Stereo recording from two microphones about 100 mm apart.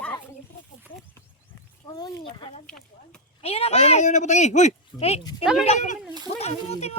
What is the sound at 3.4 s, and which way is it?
Speech, 90° left.